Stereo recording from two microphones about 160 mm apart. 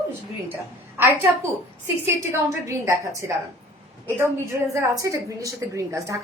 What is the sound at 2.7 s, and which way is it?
A woman's voice, 20° right (ahead or behind).